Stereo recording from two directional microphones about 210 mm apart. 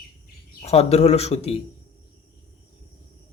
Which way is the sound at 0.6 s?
30° left (ahead or behind).